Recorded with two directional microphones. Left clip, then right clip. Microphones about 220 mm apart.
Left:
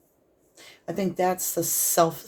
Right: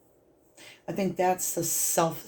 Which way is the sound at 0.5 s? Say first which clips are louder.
Left 2 dB; 40° left (ahead or behind).